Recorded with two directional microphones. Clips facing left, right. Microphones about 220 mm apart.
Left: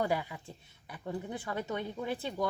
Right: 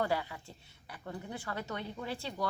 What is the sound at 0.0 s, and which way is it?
Speech, 15° left (ahead or behind).